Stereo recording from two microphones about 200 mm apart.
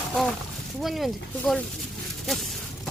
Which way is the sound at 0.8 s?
Centre (ahead or behind).